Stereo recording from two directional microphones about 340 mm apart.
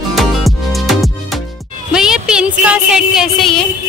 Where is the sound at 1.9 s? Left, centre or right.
Centre.